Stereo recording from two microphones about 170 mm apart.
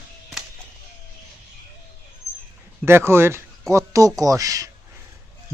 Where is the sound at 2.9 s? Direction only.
15° right (ahead or behind).